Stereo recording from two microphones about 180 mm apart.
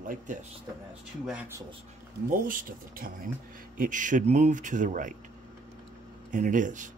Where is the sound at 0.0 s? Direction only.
45° right (ahead or behind).